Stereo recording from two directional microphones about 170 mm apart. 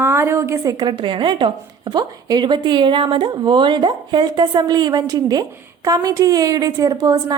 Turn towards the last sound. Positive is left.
turn(degrees=-25)  # may be behind; listen again after turning